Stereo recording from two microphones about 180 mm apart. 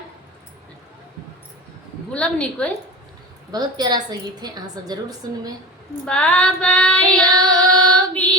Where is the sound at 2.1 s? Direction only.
5° left (ahead or behind).